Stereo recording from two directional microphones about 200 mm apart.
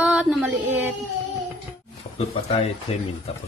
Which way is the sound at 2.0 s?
35° left (ahead or behind).